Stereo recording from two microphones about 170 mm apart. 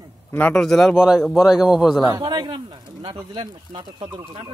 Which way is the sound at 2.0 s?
20° right (ahead or behind).